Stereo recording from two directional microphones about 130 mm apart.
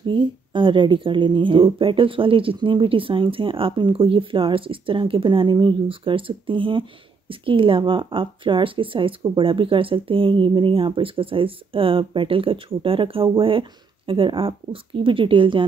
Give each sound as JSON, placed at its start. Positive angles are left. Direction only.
{"t": 0.0, "sound": "speech", "side_deg": -40}